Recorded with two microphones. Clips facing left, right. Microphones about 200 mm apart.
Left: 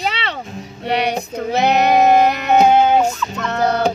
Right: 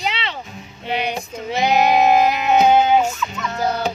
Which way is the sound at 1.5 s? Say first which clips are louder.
Left 2 dB; 65° left (ahead or behind).